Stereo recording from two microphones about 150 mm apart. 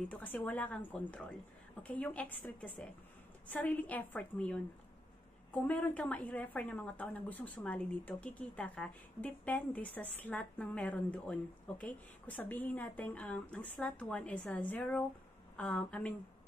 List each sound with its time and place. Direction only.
0.1 s a woman's voice: 10° left (ahead or behind)